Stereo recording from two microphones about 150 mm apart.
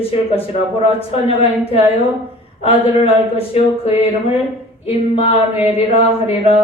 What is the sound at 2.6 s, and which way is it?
Speech, 40° left (ahead or behind).